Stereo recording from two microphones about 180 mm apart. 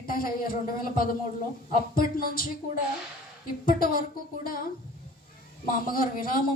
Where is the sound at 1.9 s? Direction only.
55° left (ahead or behind).